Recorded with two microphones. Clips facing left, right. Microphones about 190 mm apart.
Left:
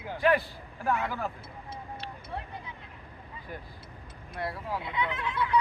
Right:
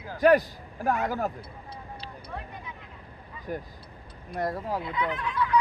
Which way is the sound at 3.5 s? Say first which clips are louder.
Right 9 dB; 45° right (ahead or behind).